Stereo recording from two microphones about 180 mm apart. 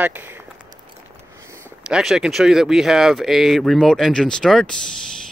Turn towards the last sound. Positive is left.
turn(degrees=5)  # may be behind; listen again after turning